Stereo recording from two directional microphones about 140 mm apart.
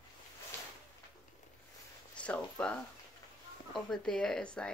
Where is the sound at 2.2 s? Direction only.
10° left (ahead or behind).